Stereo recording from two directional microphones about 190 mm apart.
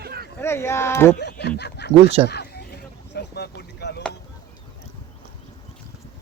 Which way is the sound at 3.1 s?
60° left (ahead or behind).